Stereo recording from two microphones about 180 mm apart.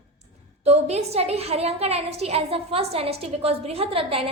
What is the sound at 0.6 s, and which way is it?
A woman's voice, 35° right (ahead or behind).